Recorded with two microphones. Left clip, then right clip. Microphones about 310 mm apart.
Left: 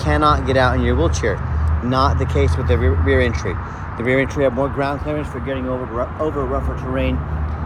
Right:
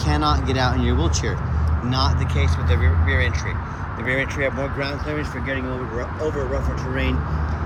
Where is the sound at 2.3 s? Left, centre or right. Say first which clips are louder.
Left 6 dB; left.